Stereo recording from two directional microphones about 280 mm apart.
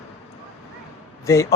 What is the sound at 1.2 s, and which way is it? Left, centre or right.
Speech, centre.